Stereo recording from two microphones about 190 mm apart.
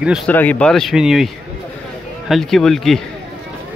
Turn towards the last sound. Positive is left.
turn(degrees=0)  # may be behind; listen again after turning